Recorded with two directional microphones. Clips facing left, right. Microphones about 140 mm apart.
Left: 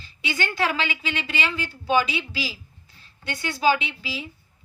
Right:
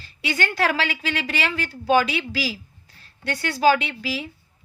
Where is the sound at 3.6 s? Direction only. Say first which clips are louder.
Right 3 dB; 60° right (ahead or behind).